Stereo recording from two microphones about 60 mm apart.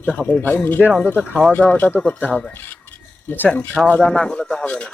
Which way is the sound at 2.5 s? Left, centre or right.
Left.